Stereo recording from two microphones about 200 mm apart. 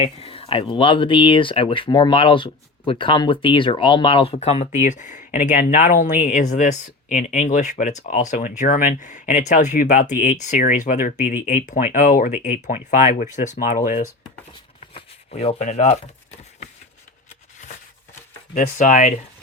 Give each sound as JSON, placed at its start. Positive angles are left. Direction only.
{"t": 0.0, "sound": "speech", "side_deg": 30}
{"t": 14.8, "sound": "shuffling cards", "side_deg": 30}
{"t": 18.5, "sound": "speech", "side_deg": 40}